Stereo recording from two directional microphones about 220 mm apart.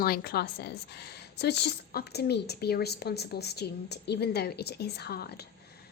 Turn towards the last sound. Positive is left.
turn(degrees=45)  # may be behind; listen again after turning